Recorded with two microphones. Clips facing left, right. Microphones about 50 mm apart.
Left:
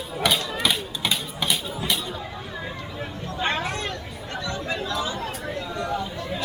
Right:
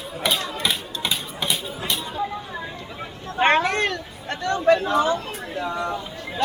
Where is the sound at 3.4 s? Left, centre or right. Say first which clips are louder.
Right 8 dB; right.